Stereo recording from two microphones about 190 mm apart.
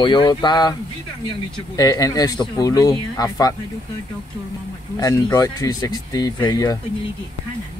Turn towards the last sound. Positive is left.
turn(degrees=20)  # may be behind; listen again after turning